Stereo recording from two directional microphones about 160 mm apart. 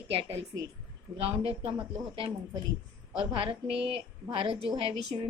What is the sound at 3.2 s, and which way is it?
A woman's voice, 35° right (ahead or behind).